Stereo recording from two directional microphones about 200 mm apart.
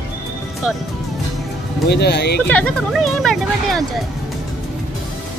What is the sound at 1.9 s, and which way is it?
Speech, 55° left (ahead or behind).